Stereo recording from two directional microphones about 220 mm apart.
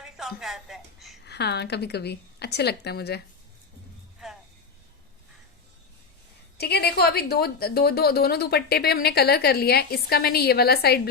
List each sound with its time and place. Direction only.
0.0 s a sound: centre (ahead or behind)
1.2 s a woman's voice: 50° left (ahead or behind)
4.2 s music: centre (ahead or behind)
6.6 s a woman's voice: 45° left (ahead or behind)